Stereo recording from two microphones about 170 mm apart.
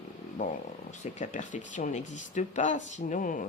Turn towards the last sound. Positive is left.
turn(degrees=50)  # may be behind; listen again after turning